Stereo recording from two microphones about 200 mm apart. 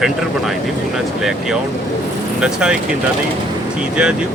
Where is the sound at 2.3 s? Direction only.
5° right (ahead or behind).